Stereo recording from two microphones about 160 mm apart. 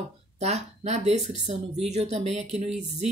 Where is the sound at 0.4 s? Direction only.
45° right (ahead or behind).